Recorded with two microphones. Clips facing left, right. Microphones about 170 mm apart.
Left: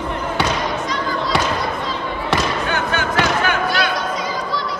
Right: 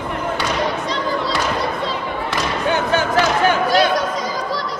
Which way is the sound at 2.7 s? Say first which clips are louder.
Right 3 dB; 35° right (ahead or behind).